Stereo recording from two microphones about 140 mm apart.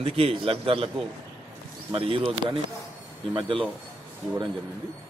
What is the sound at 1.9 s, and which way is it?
Speech, 40° right (ahead or behind).